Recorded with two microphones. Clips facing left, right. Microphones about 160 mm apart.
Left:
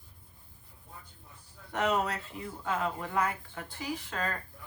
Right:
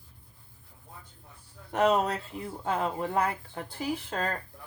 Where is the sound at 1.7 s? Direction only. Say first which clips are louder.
Right 5 dB; 30° right (ahead or behind).